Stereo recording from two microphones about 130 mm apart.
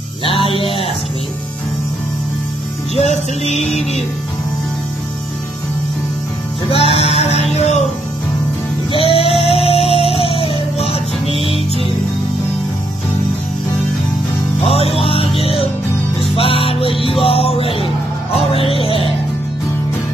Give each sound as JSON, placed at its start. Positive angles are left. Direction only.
{"t": 0.2, "sound": "music", "side_deg": 45}
{"t": 3.0, "sound": "music", "side_deg": 55}
{"t": 6.7, "sound": "music", "side_deg": 50}
{"t": 8.9, "sound": "music", "side_deg": 45}
{"t": 14.7, "sound": "music", "side_deg": 45}